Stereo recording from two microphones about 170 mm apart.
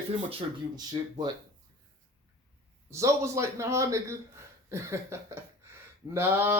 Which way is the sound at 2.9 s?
15° right (ahead or behind).